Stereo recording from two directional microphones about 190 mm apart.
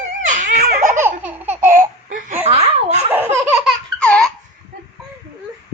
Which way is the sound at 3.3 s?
10° right (ahead or behind).